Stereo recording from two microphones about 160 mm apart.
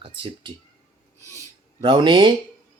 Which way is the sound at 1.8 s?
30° right (ahead or behind).